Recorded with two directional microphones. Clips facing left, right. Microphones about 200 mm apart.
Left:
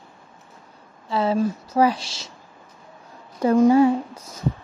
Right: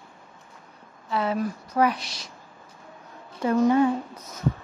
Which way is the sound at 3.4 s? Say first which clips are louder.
Left 5 dB; 30° left (ahead or behind).